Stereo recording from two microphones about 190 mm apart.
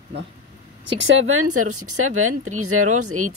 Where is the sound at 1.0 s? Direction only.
90° right.